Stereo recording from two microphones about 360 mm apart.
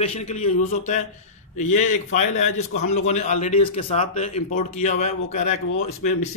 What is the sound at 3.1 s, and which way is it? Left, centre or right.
A man's voice, centre.